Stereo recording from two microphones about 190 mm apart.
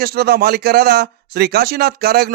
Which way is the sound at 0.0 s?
55° right (ahead or behind).